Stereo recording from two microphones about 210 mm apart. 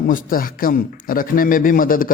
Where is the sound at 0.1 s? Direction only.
40° left (ahead or behind).